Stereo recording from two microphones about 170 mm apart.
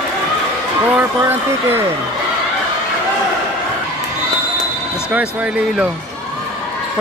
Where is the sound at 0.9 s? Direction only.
15° right (ahead or behind).